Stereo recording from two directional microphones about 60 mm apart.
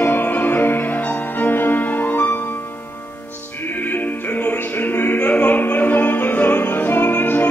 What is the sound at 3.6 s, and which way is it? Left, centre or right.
Music, left.